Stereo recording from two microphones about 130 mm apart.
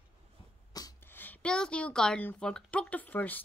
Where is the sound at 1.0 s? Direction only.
15° left (ahead or behind).